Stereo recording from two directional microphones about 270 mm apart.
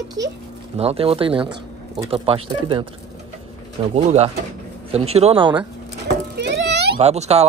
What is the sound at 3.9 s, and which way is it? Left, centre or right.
Speech, right.